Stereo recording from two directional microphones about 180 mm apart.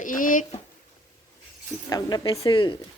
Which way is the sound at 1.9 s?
20° left (ahead or behind).